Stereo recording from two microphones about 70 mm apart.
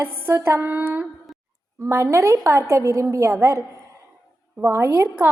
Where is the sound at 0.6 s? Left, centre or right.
Right.